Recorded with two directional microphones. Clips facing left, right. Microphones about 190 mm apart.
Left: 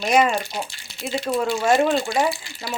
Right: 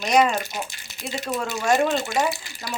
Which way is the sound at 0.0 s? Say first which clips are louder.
Left 1 dB; 10° left (ahead or behind).